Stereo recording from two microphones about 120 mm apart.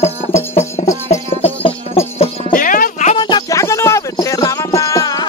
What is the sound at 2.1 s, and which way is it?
Music, 80° left.